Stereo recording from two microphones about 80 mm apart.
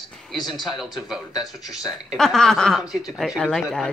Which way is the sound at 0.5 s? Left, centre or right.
Centre.